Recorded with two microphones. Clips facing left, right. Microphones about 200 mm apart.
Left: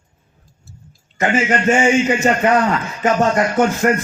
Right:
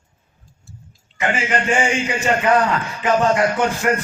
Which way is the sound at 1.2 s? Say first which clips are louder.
Left 4 dB; 40° left (ahead or behind).